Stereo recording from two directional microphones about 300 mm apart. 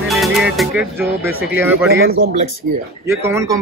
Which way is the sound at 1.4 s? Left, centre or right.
Centre.